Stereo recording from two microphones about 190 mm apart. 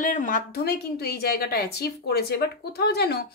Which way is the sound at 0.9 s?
55° left (ahead or behind).